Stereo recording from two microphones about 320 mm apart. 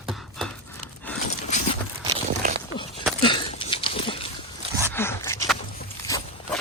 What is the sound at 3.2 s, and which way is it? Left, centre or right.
Horse, centre.